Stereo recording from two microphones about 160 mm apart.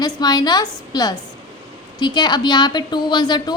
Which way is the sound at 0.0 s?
25° left (ahead or behind).